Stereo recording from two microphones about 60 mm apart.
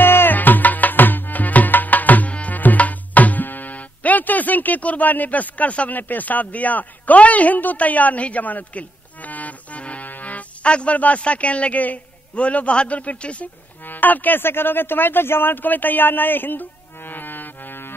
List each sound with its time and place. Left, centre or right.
0.0 s music: left
13.8 s speech: left